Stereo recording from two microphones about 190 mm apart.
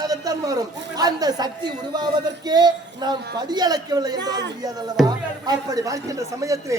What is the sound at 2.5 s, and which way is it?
A man's voice, 20° right (ahead or behind).